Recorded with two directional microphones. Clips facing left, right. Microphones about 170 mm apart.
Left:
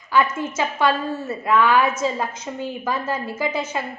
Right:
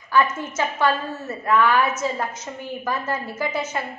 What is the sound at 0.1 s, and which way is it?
A woman's voice, 10° left (ahead or behind).